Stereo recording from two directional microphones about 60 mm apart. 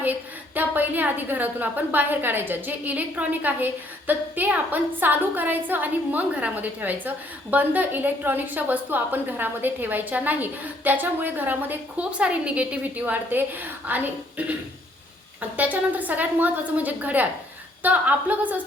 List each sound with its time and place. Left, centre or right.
0.0 s a woman's voice: right
12.1 s a woman's voice: right